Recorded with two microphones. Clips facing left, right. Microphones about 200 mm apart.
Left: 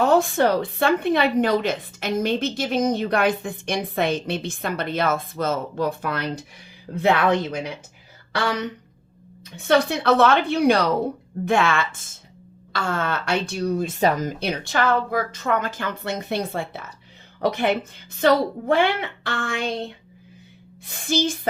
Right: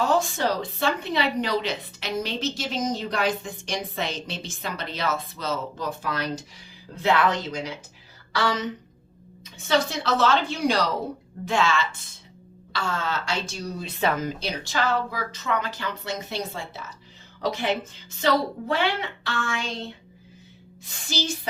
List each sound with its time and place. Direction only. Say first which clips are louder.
0.0 s a woman's voice: left 6 dB; 60° left (ahead or behind)
9.6 s a woman's voice: left 5 dB; 60° left (ahead or behind); by 14.3 s 45° left (ahead or behind)
14.3 s a woman's voice: left 4 dB; 60° left (ahead or behind)
20.8 s speech: left 7 dB; 55° left (ahead or behind)